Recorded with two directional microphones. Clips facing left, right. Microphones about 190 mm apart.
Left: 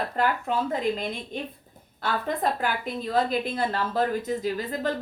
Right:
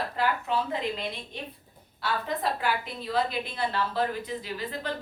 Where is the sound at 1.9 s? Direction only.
50° left (ahead or behind).